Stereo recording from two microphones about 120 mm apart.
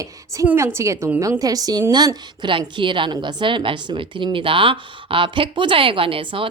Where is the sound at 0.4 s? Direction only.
20° right (ahead or behind).